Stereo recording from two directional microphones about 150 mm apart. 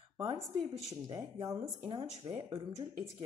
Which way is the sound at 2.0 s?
35° right (ahead or behind).